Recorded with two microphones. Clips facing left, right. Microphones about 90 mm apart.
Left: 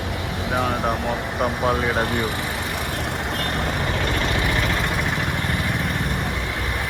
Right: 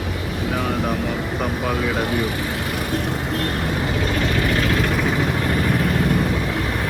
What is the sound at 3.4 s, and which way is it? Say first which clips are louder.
Vehicle: right 2 dB; 70° left (ahead or behind).